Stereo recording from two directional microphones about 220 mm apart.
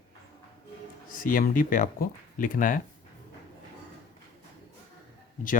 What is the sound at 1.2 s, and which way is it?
Speech, 40° left (ahead or behind).